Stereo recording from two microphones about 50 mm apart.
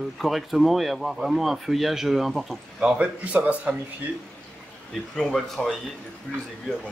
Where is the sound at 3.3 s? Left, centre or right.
Right.